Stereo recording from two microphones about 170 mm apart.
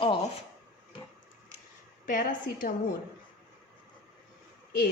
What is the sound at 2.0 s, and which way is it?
Speech, 50° left (ahead or behind).